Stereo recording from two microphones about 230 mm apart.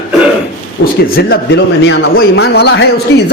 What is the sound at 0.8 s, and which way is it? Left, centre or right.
A man's voice, left.